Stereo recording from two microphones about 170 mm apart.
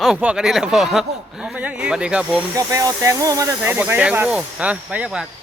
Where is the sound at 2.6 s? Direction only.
20° right (ahead or behind).